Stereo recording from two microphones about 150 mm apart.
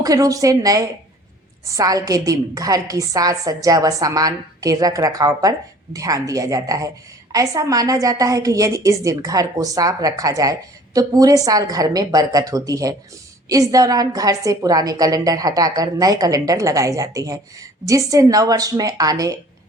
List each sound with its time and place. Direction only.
0.0 s a woman's voice: 25° right (ahead or behind)